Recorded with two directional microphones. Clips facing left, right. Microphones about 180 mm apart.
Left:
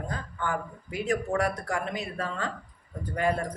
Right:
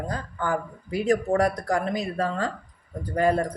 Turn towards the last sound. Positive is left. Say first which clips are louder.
# right 5 dB
turn(degrees=-35)  # may be behind; listen again after turning